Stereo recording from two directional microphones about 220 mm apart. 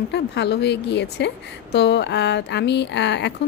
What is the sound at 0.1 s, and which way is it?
A woman's voice, 50° left (ahead or behind).